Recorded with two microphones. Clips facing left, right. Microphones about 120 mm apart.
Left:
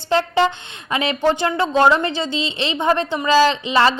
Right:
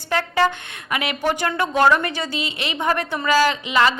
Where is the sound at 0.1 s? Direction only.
25° left (ahead or behind).